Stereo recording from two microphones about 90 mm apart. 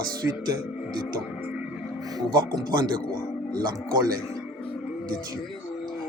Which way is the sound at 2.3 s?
50° right (ahead or behind).